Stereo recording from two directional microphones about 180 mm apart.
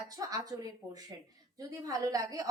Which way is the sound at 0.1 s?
20° right (ahead or behind).